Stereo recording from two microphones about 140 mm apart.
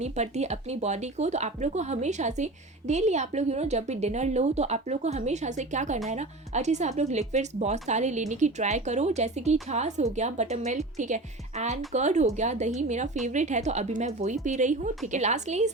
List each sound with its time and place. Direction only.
0.0 s speech: 50° right (ahead or behind)